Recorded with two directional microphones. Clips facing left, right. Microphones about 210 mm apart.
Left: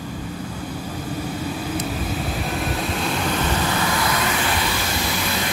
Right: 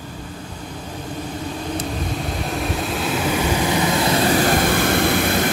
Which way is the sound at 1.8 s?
5° left (ahead or behind).